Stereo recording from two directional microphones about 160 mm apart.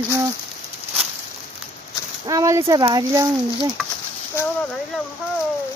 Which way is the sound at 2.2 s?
20° right (ahead or behind).